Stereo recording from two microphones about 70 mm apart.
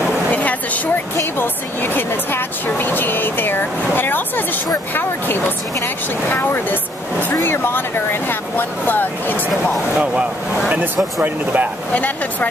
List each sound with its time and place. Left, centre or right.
0.3 s a sound: left
1.1 s speech: left
6.3 s speech: left
11.2 s speech: right
11.9 s speech: left